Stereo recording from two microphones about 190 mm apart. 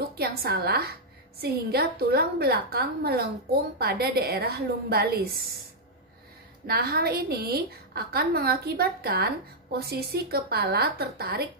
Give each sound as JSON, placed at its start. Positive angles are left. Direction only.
{"t": 0.1, "sound": "a woman's voice", "side_deg": -55}
{"t": 6.7, "sound": "a woman's voice", "side_deg": -55}